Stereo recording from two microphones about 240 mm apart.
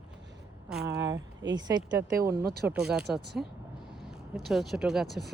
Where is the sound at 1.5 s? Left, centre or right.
Centre.